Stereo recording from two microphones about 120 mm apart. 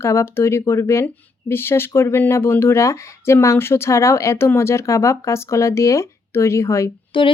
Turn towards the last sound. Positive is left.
turn(degrees=45)  # may be behind; listen again after turning